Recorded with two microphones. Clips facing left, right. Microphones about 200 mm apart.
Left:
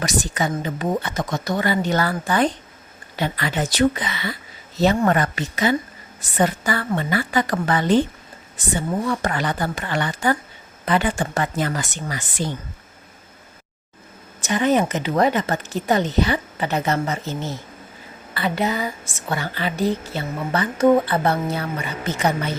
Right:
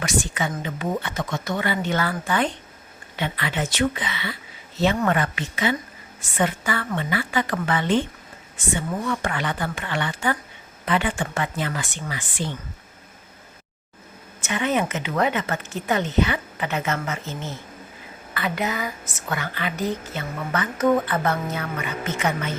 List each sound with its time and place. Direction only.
0.0 s a woman's voice: 35° left (ahead or behind)
14.4 s a woman's voice: 35° left (ahead or behind)